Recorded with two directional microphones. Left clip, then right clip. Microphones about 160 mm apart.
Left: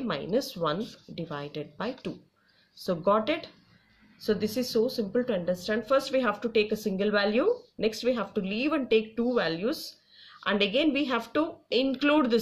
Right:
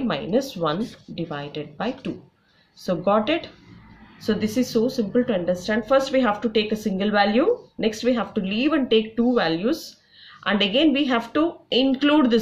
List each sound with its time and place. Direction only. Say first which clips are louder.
0.1 s speech: right 4 dB; 35° left (ahead or behind)